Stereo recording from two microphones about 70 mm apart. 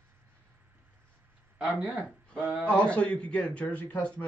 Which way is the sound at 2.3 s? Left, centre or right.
Right.